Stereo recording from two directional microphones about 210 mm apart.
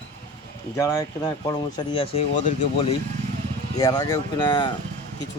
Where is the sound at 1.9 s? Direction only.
25° left (ahead or behind).